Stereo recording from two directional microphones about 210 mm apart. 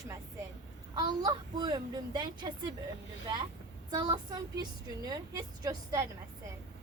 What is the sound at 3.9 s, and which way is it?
A child's voice, 20° right (ahead or behind).